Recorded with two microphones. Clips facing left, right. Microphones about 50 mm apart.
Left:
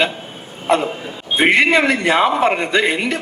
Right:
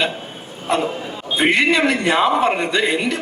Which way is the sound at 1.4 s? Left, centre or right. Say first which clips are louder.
Left 2 dB; left.